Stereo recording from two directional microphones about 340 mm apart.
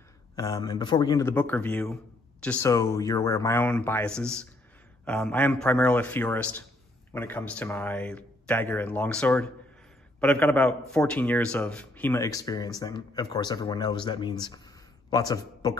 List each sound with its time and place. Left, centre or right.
0.4 s a man's voice: centre